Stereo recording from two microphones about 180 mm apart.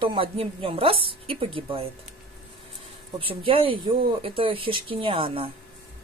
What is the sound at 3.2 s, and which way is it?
Speech, 30° right (ahead or behind).